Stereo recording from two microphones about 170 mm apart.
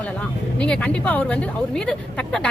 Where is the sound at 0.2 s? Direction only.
5° left (ahead or behind).